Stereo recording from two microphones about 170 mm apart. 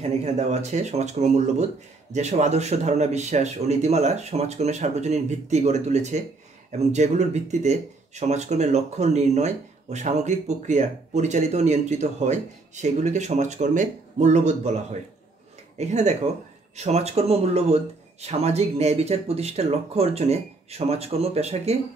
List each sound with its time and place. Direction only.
0.0 s speech: 40° right (ahead or behind)